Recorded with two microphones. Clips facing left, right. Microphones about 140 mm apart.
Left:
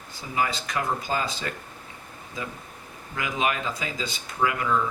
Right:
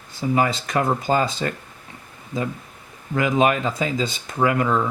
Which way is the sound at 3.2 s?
45° right (ahead or behind).